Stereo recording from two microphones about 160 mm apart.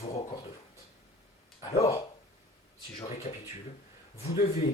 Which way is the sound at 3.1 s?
45° left (ahead or behind).